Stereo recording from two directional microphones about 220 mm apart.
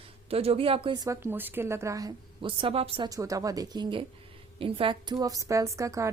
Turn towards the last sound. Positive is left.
turn(degrees=-15)  # may be behind; listen again after turning